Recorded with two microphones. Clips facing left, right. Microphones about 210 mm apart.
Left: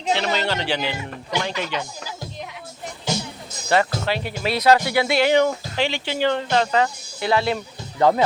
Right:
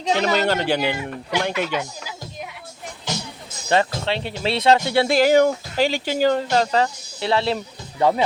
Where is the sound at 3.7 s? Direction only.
25° right (ahead or behind).